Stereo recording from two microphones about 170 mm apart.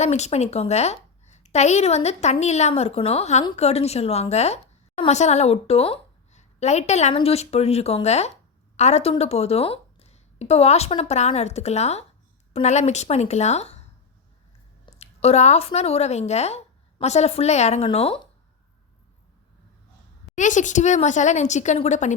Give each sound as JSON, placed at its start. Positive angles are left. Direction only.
{"t": 0.0, "sound": "a woman's voice", "side_deg": 40}
{"t": 14.9, "sound": "a woman's voice", "side_deg": 40}
{"t": 20.3, "sound": "speech", "side_deg": 45}